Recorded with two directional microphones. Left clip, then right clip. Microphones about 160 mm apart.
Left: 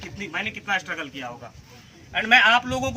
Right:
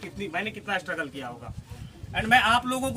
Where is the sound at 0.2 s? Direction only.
30° right (ahead or behind).